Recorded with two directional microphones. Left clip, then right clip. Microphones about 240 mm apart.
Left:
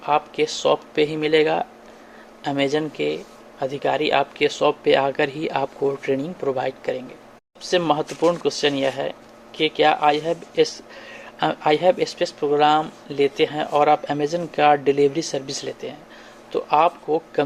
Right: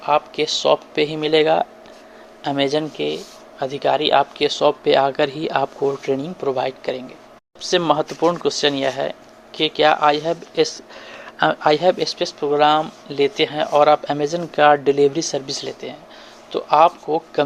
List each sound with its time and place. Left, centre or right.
0.0 s speech: right